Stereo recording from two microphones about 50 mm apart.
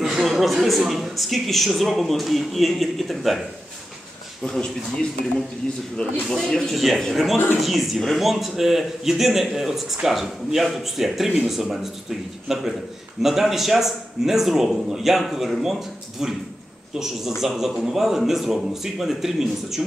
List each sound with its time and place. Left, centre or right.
0.0 s a man's voice: centre
4.4 s speech: centre
6.2 s a man's voice: centre